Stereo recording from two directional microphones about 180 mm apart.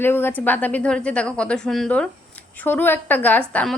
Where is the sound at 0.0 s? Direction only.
10° left (ahead or behind).